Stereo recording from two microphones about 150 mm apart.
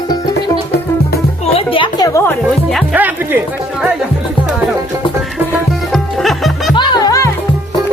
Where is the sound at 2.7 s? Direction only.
10° right (ahead or behind).